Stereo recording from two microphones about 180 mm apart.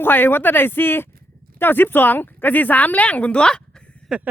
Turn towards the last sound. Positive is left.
turn(degrees=-5)  # may be behind; listen again after turning